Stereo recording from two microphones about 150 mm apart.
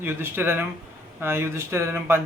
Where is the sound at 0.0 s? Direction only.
15° right (ahead or behind).